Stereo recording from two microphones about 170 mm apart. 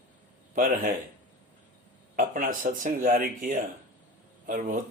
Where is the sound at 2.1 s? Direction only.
55° right (ahead or behind).